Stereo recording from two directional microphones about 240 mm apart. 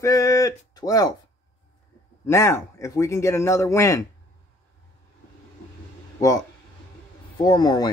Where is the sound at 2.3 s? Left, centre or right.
Centre.